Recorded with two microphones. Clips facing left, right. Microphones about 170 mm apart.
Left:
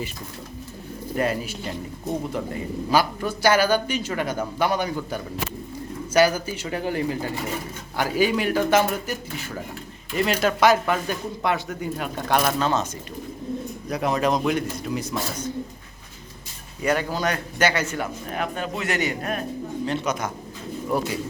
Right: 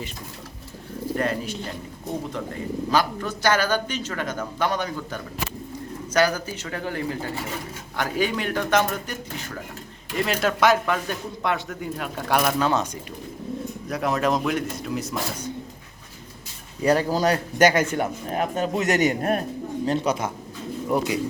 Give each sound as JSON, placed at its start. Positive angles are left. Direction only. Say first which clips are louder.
{"t": 1.1, "sound": "a man's voice", "louder": "left 1 dB", "side_deg": 10}
{"t": 7.9, "sound": "a man's voice", "louder": "left 3 dB", "side_deg": 5}
{"t": 10.4, "sound": "speech", "louder": "left 1 dB", "side_deg": 0}
{"t": 13.8, "sound": "speech", "louder": "left 1 dB", "side_deg": 0}
{"t": 16.8, "sound": "a man's voice", "louder": "right 3 dB", "side_deg": -35}
{"t": 17.9, "sound": "a man's voice", "louder": "right 3 dB", "side_deg": -30}
{"t": 20.8, "sound": "speech", "louder": "right 2 dB", "side_deg": -15}